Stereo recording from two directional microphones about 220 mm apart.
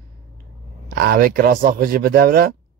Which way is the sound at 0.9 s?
45° right (ahead or behind).